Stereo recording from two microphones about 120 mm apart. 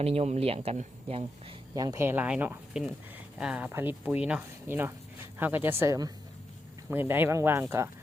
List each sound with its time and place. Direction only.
0.0 s speech: 60° right (ahead or behind)
1.7 s speech: 30° right (ahead or behind)
2.0 s speech: 10° right (ahead or behind)